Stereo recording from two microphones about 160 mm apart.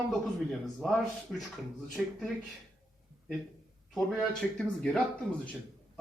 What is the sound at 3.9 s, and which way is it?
Speech, 5° left (ahead or behind).